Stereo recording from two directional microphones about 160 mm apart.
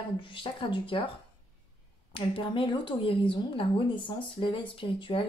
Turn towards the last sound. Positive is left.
turn(degrees=35)  # may be behind; listen again after turning